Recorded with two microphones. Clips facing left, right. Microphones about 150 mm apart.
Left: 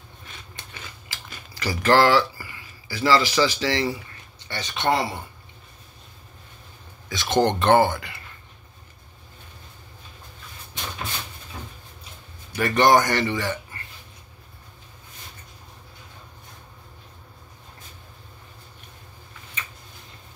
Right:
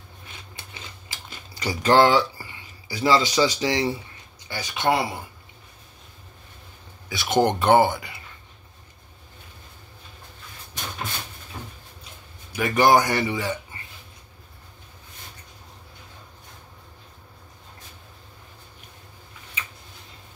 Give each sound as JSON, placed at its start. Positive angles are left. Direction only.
{"t": 1.0, "sound": "speech", "side_deg": -20}
{"t": 7.1, "sound": "speech", "side_deg": -10}
{"t": 12.5, "sound": "speech", "side_deg": -5}